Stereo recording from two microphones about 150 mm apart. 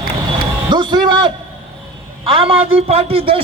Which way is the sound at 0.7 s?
30° right (ahead or behind).